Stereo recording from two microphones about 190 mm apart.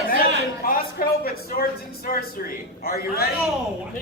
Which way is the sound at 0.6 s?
50° left (ahead or behind).